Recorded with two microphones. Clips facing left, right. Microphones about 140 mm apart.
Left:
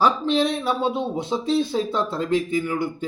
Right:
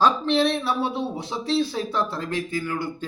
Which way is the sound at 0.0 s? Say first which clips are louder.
Even; 15° left (ahead or behind).